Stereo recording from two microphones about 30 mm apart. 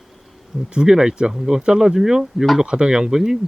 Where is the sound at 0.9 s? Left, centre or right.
Right.